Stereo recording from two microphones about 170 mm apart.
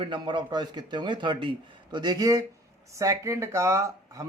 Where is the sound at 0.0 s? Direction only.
25° right (ahead or behind).